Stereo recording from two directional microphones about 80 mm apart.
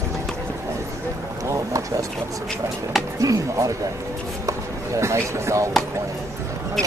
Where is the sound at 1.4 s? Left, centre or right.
Right.